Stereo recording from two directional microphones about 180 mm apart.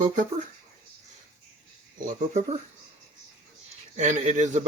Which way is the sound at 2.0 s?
40° right (ahead or behind).